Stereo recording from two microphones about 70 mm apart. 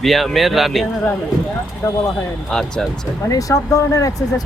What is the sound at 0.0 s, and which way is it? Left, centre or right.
Speech, centre.